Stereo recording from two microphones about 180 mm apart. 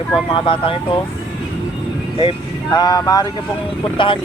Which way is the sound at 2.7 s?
20° left (ahead or behind).